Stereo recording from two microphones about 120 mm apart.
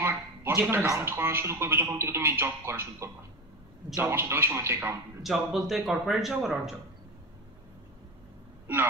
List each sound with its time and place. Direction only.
0.0 s a sound: 20° right (ahead or behind)
0.8 s speech: 20° right (ahead or behind)
5.2 s speech: centre (ahead or behind)